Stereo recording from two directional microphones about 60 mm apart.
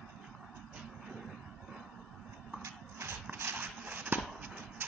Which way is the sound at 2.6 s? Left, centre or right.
Right.